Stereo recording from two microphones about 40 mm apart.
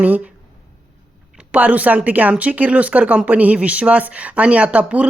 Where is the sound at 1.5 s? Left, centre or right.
Right.